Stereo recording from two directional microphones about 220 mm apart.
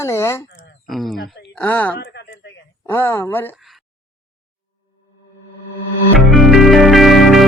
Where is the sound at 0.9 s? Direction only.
Centre (ahead or behind).